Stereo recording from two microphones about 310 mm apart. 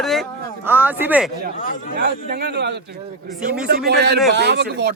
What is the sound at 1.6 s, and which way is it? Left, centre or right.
Speech, left.